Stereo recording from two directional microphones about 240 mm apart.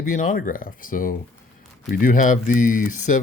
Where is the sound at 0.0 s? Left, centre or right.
Left.